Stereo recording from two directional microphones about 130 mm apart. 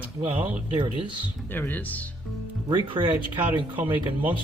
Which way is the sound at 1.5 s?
15° left (ahead or behind).